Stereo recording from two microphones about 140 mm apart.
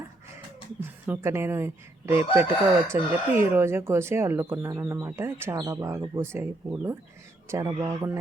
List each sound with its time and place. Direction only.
1.0 s a woman's voice: 15° right (ahead or behind)